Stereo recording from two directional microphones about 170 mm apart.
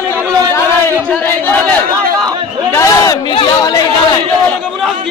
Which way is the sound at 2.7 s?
20° left (ahead or behind).